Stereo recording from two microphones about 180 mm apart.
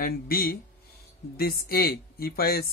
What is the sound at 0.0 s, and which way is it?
Speech, 55° left (ahead or behind).